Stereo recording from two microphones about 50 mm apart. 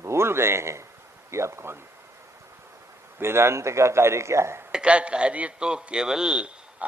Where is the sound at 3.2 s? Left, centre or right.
Right.